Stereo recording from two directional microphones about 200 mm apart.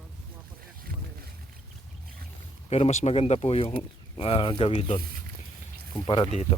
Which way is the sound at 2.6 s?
30° left (ahead or behind).